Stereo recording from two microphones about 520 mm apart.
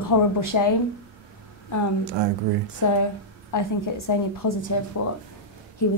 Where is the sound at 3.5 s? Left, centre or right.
Left.